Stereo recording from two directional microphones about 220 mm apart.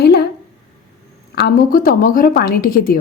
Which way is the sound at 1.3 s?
45° left (ahead or behind).